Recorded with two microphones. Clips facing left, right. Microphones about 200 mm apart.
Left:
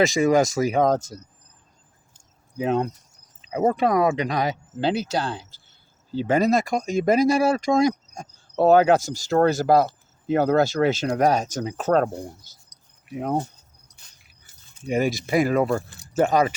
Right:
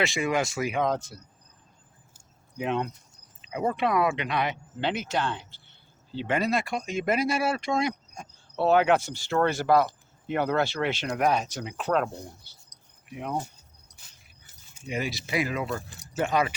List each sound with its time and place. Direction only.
0.0 s speech: 40° left (ahead or behind)
2.6 s speech: 35° left (ahead or behind)
14.8 s speech: 45° left (ahead or behind)